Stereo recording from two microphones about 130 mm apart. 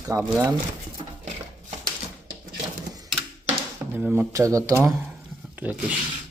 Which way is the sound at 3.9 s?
15° right (ahead or behind).